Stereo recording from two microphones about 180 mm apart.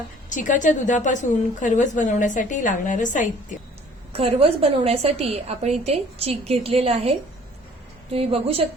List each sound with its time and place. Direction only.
0.3 s a woman's voice: 45° left (ahead or behind)
4.1 s a woman's voice: 35° right (ahead or behind)